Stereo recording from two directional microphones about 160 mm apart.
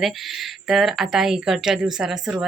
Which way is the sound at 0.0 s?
Centre (ahead or behind).